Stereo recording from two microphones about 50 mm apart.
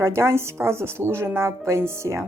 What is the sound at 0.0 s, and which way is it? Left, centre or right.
Speech, right.